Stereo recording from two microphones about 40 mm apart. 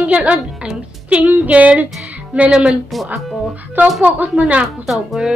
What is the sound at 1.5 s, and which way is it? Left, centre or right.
Speech, right.